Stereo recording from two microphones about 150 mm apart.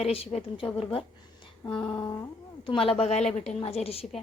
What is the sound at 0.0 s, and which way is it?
Speech, 40° left (ahead or behind).